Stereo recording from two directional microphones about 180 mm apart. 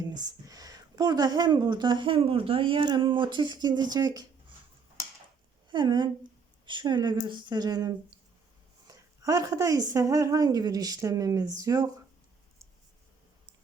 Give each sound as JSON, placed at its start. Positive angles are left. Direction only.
{"t": 0.3, "sound": "speech", "side_deg": -20}
{"t": 5.7, "sound": "speech", "side_deg": -25}